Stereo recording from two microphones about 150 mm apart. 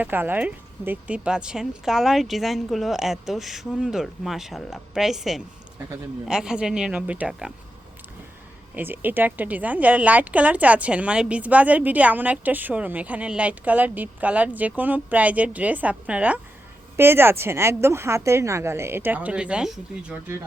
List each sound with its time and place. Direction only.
0.0 s speech: 10° right (ahead or behind)
8.7 s a woman's voice: 10° right (ahead or behind)